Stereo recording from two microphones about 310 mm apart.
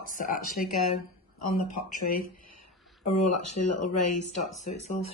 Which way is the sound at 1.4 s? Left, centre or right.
Left.